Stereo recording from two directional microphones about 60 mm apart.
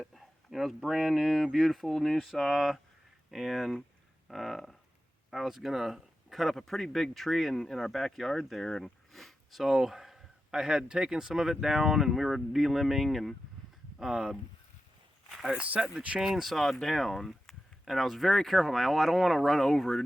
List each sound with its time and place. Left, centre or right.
0.0 s speech: centre
14.0 s speech: centre
15.3 s a sound: centre
15.5 s speech: right
16.2 s speech: centre